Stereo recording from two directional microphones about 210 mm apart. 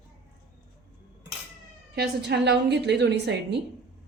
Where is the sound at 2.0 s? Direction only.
55° right (ahead or behind).